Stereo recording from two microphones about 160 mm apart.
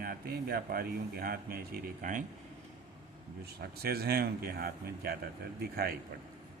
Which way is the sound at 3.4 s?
75° right (ahead or behind).